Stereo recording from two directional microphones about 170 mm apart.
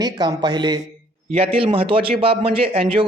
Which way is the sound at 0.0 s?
25° right (ahead or behind).